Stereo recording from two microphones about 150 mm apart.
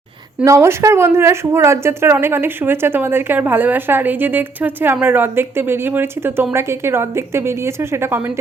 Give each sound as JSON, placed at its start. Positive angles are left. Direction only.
{"t": 0.4, "sound": "a woman's voice", "side_deg": -20}